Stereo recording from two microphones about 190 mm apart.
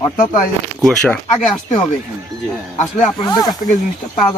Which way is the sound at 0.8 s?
5° left (ahead or behind).